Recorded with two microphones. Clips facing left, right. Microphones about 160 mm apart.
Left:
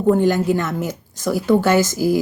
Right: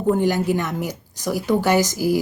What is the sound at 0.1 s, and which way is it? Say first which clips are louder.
A woman's voice: left 3 dB; 15° right (ahead or behind).